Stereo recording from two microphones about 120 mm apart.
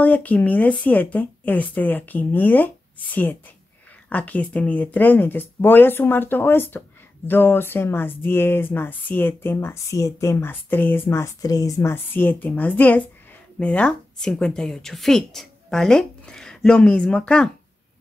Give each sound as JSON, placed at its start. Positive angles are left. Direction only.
{"t": 0.0, "sound": "a woman's voice", "side_deg": 10}